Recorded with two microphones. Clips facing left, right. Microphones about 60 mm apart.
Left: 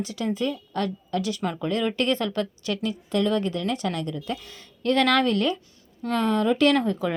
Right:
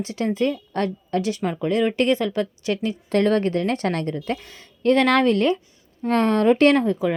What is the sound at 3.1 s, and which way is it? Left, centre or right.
A woman's voice, right.